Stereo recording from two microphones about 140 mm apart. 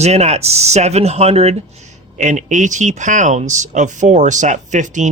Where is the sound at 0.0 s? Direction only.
50° right (ahead or behind).